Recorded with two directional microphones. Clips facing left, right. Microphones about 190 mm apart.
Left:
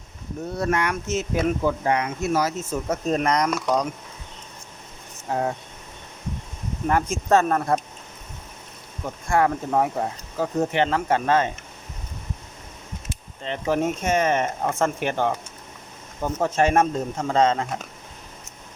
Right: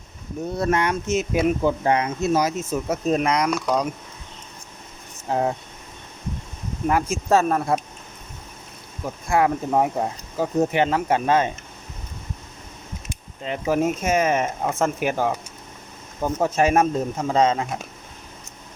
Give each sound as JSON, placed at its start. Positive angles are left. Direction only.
{"t": 0.5, "sound": "speech", "side_deg": -25}
{"t": 1.8, "sound": "speech", "side_deg": -25}
{"t": 2.9, "sound": "speech", "side_deg": -5}
{"t": 5.3, "sound": "speech", "side_deg": -25}
{"t": 6.8, "sound": "speech", "side_deg": -5}
{"t": 9.0, "sound": "speech", "side_deg": -15}
{"t": 13.1, "sound": "speech", "side_deg": -10}